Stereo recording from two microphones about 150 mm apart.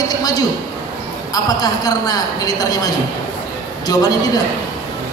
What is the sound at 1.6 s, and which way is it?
A man's voice, 25° left (ahead or behind).